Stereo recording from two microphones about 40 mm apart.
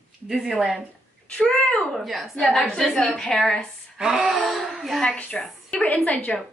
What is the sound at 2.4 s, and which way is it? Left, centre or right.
A woman's voice, centre.